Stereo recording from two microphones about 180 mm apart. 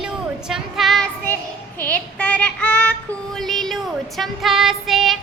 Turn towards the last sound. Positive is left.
turn(degrees=0)  # may be behind; listen again after turning